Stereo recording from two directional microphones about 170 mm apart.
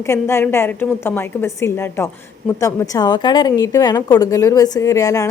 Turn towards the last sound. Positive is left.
turn(degrees=20)  # may be behind; listen again after turning